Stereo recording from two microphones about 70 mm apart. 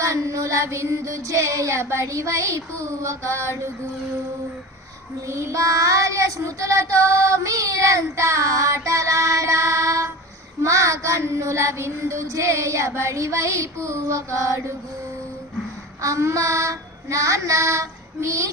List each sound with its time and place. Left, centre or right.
0.0 s child singing: right
5.3 s child singing: right
16.0 s child singing: right